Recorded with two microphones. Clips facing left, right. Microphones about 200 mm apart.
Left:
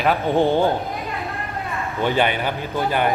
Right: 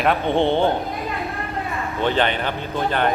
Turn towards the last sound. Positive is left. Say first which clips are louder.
# even
turn(degrees=10)  # may be behind; listen again after turning